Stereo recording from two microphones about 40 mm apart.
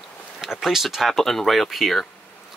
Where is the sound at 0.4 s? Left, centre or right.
Centre.